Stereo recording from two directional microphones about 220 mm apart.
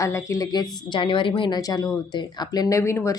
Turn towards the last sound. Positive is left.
turn(degrees=10)  # may be behind; listen again after turning